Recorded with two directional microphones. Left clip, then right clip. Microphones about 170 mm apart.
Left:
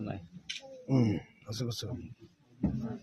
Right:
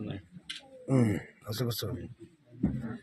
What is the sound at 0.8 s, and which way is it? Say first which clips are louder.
Speech: right 2 dB; 5° left (ahead or behind).